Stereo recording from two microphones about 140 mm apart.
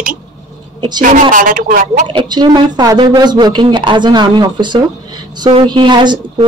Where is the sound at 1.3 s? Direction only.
75° right (ahead or behind).